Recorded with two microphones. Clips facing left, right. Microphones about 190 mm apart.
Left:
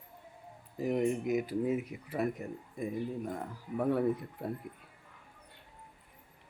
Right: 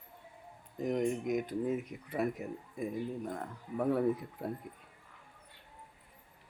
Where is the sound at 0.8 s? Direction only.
5° left (ahead or behind).